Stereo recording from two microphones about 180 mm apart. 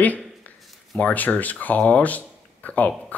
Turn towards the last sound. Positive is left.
turn(degrees=5)  # may be behind; listen again after turning